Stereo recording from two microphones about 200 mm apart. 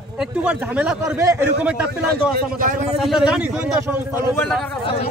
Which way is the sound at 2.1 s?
40° right (ahead or behind).